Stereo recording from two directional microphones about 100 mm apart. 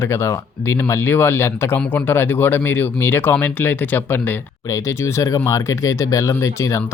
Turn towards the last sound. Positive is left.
turn(degrees=30)  # may be behind; listen again after turning